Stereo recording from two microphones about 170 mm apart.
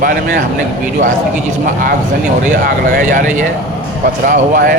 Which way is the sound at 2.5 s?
55° right (ahead or behind).